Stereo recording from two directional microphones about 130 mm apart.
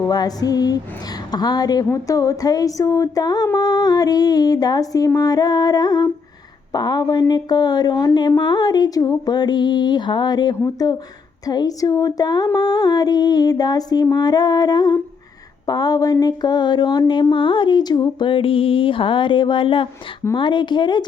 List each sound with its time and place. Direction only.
0.1 s a woman's voice: 30° left (ahead or behind)